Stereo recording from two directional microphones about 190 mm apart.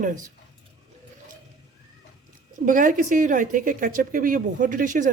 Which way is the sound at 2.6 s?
45° right (ahead or behind).